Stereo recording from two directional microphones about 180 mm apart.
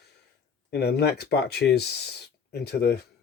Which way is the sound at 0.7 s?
65° left (ahead or behind).